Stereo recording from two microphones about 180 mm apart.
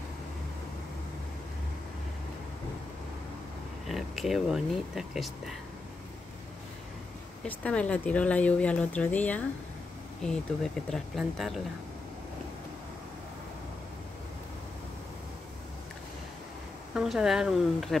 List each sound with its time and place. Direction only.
3.8 s speech: centre (ahead or behind)
7.4 s speech: 10° left (ahead or behind)
16.9 s speech: 5° right (ahead or behind)